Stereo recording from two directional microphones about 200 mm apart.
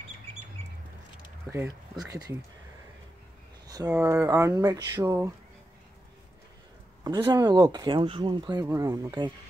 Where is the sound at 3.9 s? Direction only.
15° right (ahead or behind).